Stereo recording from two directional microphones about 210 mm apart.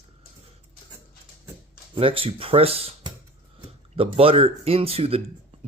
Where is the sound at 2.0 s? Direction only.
25° right (ahead or behind).